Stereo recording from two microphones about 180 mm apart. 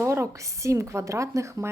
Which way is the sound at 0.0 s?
15° right (ahead or behind).